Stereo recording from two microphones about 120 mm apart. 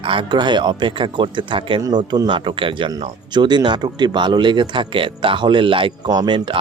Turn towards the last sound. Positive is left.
turn(degrees=-40)  # may be behind; listen again after turning